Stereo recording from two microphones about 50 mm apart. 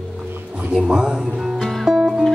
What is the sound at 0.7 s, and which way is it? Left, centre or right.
Speech, centre.